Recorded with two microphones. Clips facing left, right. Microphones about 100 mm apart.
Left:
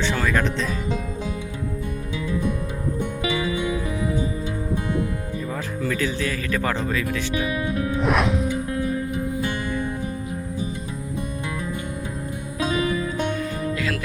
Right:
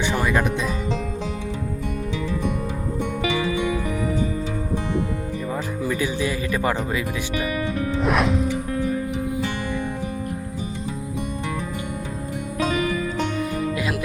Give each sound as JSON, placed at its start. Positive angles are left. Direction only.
{"t": 0.0, "sound": "music", "side_deg": -15}
{"t": 5.8, "sound": "speech", "side_deg": -15}
{"t": 8.0, "sound": "music", "side_deg": 0}